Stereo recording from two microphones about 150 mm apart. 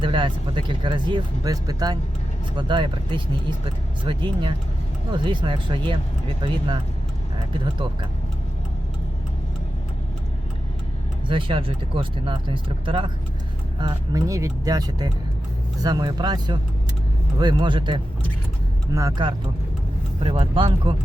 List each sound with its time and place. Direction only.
0.0 s speech: 35° right (ahead or behind)
11.3 s speech: 35° right (ahead or behind)
20.2 s speech: 35° right (ahead or behind)